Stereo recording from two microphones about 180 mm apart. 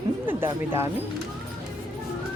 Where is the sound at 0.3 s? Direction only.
15° right (ahead or behind).